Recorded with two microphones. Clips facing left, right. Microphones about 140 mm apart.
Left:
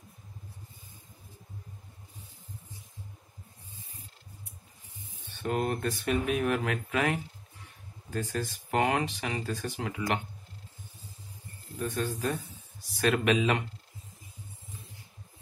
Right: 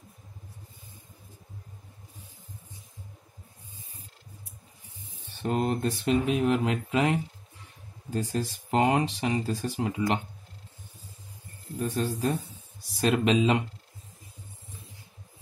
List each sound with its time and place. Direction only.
5.3 s speech: 30° right (ahead or behind)
11.8 s speech: 35° right (ahead or behind)